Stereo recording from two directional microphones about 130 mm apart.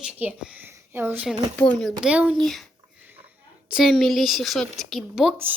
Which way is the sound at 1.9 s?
5° right (ahead or behind).